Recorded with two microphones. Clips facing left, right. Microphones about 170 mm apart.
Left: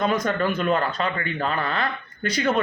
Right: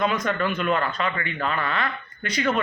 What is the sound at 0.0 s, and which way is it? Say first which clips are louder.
Speech: left 1 dB; 35° left (ahead or behind).